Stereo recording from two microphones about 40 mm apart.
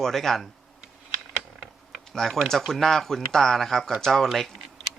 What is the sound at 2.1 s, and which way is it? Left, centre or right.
Speech, centre.